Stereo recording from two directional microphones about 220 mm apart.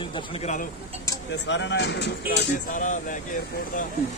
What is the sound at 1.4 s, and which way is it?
Speech, 55° left (ahead or behind).